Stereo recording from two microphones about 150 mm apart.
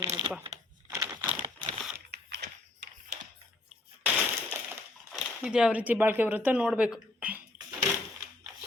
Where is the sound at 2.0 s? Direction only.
90° right.